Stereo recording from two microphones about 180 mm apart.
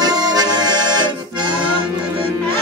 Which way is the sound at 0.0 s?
20° right (ahead or behind).